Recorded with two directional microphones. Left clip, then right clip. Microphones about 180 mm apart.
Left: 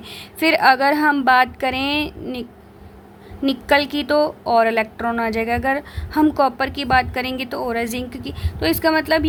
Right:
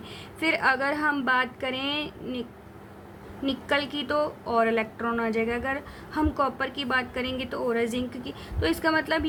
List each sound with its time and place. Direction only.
0.1 s a woman's voice: 50° left (ahead or behind)
3.4 s a woman's voice: 50° left (ahead or behind)